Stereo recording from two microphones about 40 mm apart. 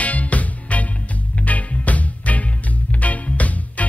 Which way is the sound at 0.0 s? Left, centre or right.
Left.